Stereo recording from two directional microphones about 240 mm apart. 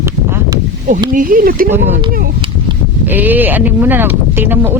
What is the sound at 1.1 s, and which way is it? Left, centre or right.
Speech, right.